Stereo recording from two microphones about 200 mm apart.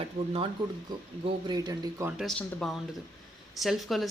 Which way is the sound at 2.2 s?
Centre (ahead or behind).